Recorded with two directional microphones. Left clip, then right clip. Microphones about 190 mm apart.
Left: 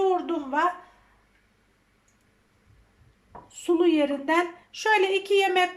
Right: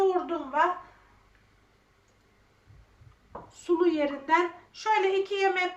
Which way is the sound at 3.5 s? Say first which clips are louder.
Left 3 dB; 50° left (ahead or behind).